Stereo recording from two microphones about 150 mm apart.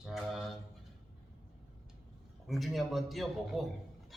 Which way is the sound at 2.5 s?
Centre (ahead or behind).